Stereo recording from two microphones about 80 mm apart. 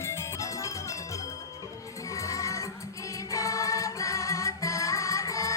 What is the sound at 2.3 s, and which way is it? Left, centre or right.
Music, left.